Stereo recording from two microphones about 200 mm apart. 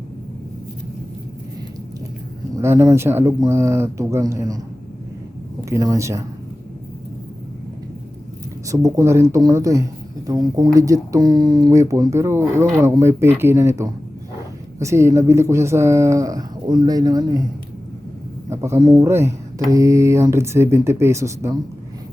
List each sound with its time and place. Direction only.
2.6 s speech: 15° right (ahead or behind)
5.6 s speech: 15° right (ahead or behind)
8.6 s speech: 15° right (ahead or behind)
18.4 s speech: 15° right (ahead or behind)